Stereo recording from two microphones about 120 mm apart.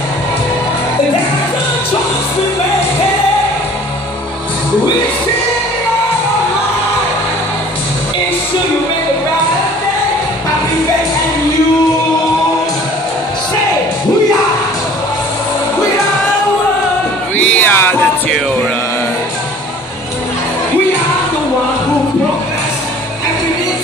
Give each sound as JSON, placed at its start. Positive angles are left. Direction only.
{"t": 17.4, "sound": "music", "side_deg": 15}